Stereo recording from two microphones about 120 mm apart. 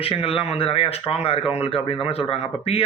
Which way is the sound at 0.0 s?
50° left (ahead or behind).